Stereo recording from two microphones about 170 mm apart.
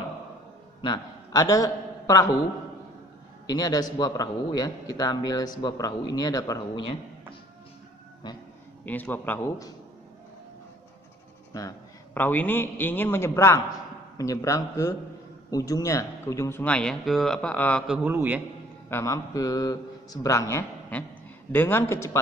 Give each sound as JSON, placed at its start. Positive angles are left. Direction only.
{"t": 0.8, "sound": "a man's voice", "side_deg": 20}
{"t": 3.4, "sound": "a man's voice", "side_deg": 25}
{"t": 8.8, "sound": "speech", "side_deg": 10}
{"t": 11.5, "sound": "a man's voice", "side_deg": 15}
{"t": 17.8, "sound": "a man's voice", "side_deg": -5}
{"t": 18.9, "sound": "a man's voice", "side_deg": 15}